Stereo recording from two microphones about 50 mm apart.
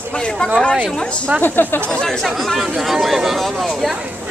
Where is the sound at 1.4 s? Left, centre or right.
Left.